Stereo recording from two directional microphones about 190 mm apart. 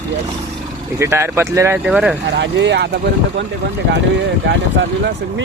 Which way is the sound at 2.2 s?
65° right (ahead or behind).